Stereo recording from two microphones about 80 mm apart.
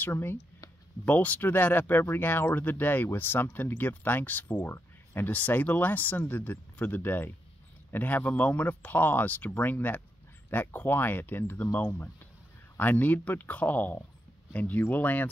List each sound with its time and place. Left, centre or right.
0.0 s speech: left